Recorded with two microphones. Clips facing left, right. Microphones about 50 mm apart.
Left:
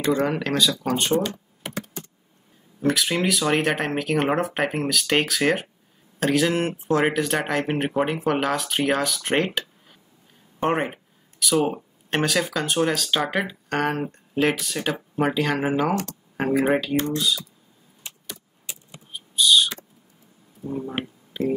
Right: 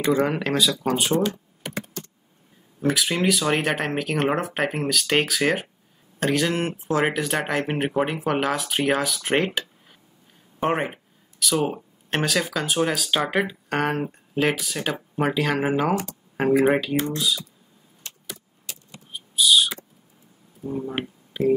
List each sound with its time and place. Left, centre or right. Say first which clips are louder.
0.0 s speech: right 1 dB; centre
2.0 s computer keyboard: right 1 dB; centre
2.8 s speech: even; centre
18.0 s vehicle: left 1 dB; centre
19.1 s a sound: even; centre
20.9 s speech: right 1 dB; centre